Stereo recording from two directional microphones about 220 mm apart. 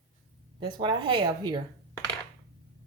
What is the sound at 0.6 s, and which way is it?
Speech, 20° right (ahead or behind).